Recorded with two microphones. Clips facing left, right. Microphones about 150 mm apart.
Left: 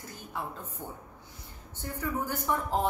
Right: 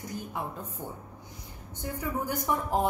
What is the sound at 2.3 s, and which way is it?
Speech, 15° right (ahead or behind).